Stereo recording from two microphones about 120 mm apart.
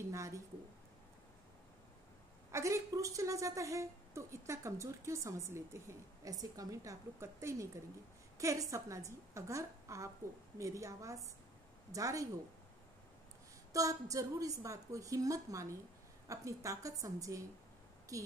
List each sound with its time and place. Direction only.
0.1 s speech: 25° right (ahead or behind)
2.5 s a woman's voice: 25° right (ahead or behind)
13.7 s a woman's voice: 30° right (ahead or behind)